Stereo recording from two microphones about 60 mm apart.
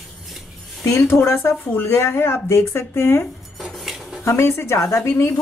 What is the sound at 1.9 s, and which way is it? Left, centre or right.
Speech, left.